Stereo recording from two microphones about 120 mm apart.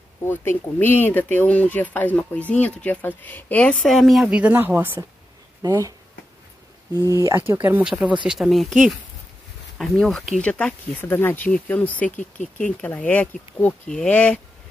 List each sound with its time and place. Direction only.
0.2 s speech: 20° left (ahead or behind); by 5.0 s 15° right (ahead or behind)
5.6 s speech: 30° right (ahead or behind); by 12.1 s 15° left (ahead or behind)
12.2 s speech: 90° left
12.8 s speech: 15° left (ahead or behind)